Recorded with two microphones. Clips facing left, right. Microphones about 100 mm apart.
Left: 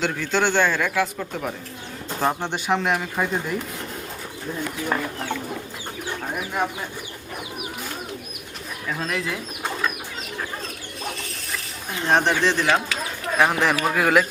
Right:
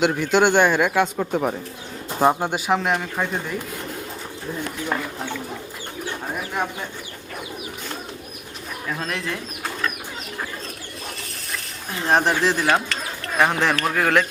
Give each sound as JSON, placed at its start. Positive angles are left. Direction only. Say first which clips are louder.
{"t": 0.0, "sound": "a man's voice", "louder": "right 5 dB", "side_deg": -15}
{"t": 2.0, "sound": "speech", "louder": "right 5 dB", "side_deg": -10}
{"t": 8.9, "sound": "speech", "louder": "left 1 dB", "side_deg": 0}
{"t": 11.2, "sound": "a sound", "louder": "left 1 dB", "side_deg": 0}
{"t": 13.3, "sound": "speech", "louder": "even", "side_deg": 0}